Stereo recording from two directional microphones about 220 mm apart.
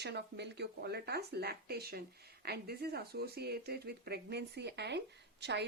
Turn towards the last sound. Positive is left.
turn(degrees=-50)  # may be behind; listen again after turning